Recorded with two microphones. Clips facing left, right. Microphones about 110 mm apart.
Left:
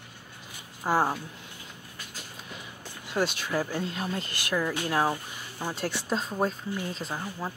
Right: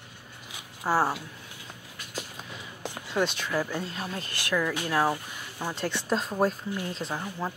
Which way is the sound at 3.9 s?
35° left (ahead or behind).